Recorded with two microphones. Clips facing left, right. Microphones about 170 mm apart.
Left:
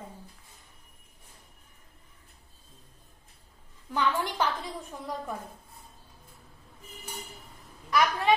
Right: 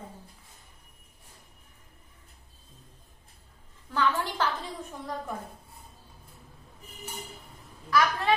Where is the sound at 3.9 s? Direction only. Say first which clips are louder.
Even; 15° left (ahead or behind).